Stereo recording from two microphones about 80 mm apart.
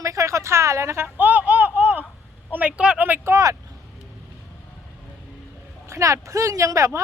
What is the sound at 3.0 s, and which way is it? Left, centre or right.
Vehicle, right.